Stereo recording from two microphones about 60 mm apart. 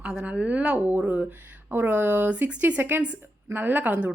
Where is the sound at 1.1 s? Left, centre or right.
Right.